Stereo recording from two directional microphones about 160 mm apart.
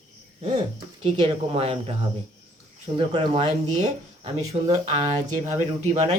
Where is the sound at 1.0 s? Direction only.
40° right (ahead or behind).